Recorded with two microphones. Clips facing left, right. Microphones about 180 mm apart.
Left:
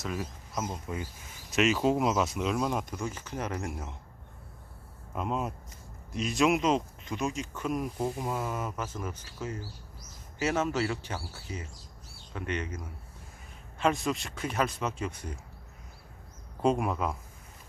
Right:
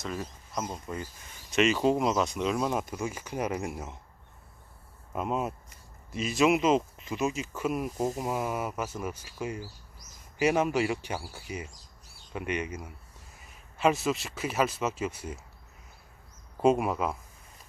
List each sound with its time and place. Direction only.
0.0 s speech: 5° left (ahead or behind)
5.1 s speech: 5° right (ahead or behind)
7.9 s speech: 45° right (ahead or behind)
8.2 s speech: 10° right (ahead or behind)
16.6 s speech: 5° right (ahead or behind)